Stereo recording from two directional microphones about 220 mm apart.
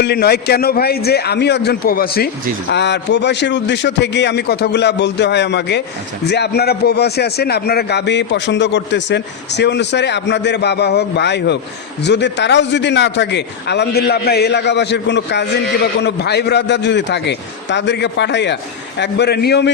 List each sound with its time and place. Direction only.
0.0 s a man's voice: 45° left (ahead or behind)